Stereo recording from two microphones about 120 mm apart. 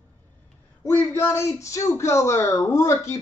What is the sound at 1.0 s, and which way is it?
Speech, 20° left (ahead or behind).